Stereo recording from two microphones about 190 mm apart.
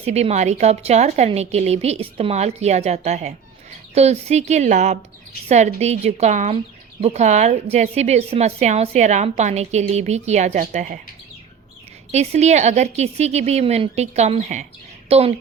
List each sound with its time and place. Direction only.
0.0 s a woman's voice: 35° right (ahead or behind)
12.1 s a woman's voice: 35° right (ahead or behind)